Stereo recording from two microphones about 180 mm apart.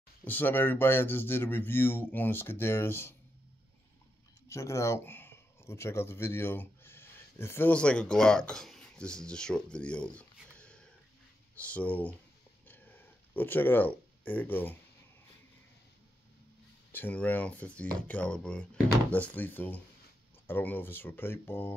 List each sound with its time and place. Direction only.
0.2 s speech: 10° left (ahead or behind)
4.5 s speech: 15° left (ahead or behind)
12.6 s a sound: 10° left (ahead or behind)
16.9 s speech: 10° left (ahead or behind)